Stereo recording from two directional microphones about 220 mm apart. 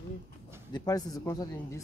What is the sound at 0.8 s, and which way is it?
Speech, 15° left (ahead or behind).